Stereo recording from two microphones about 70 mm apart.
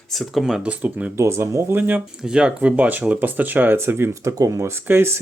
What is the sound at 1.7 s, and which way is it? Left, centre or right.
Speech, right.